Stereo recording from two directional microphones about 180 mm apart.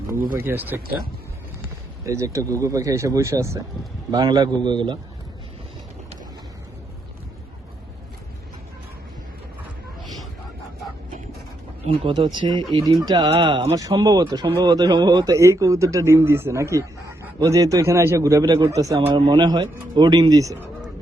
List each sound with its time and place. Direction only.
0.3 s a man's voice: 10° right (ahead or behind)
2.0 s a man's voice: 15° right (ahead or behind)
11.9 s a man's voice: 25° right (ahead or behind)
13.7 s a man's voice: 20° right (ahead or behind)